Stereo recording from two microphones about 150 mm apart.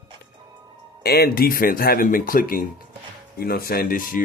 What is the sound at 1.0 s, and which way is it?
Speech, 90° left.